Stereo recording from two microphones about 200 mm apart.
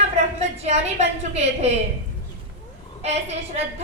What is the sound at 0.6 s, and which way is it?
A woman's voice, 35° right (ahead or behind).